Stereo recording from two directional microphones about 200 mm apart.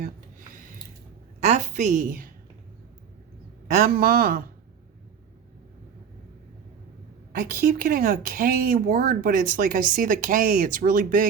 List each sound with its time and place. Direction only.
0.0 s a sound: 40° right (ahead or behind)
1.4 s a woman's voice: 35° right (ahead or behind)
3.8 s speech: 50° right (ahead or behind)
7.8 s speech: 45° right (ahead or behind)